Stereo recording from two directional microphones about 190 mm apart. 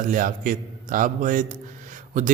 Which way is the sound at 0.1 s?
45° right (ahead or behind).